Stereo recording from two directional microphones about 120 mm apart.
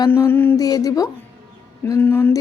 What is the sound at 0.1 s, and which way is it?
Mantra, 20° left (ahead or behind).